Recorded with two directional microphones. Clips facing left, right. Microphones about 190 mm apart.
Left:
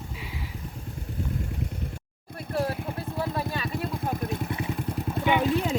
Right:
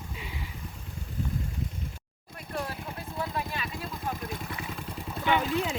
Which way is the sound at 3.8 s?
55° left (ahead or behind).